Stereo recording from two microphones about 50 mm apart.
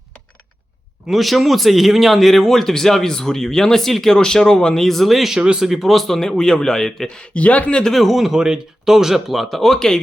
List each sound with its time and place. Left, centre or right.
1.0 s speech: centre
5.4 s speech: centre
5.6 s a man's voice: centre
7.3 s speech: left
7.9 s speech: centre